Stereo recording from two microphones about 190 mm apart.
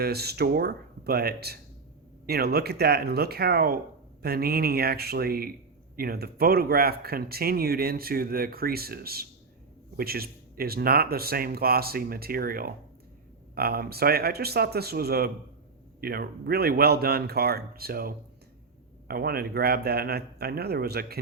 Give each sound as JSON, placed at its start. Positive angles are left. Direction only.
{"t": 0.0, "sound": "a man's voice", "side_deg": -55}